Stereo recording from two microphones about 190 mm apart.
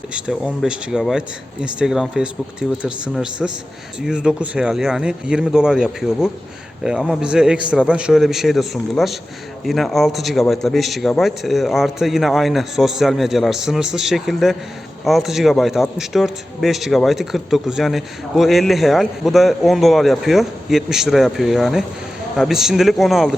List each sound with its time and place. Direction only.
0.1 s a man's voice: 5° right (ahead or behind)